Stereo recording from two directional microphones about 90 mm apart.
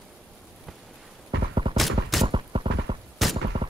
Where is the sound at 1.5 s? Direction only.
80° right.